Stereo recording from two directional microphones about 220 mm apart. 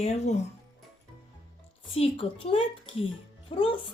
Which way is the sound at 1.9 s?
25° left (ahead or behind).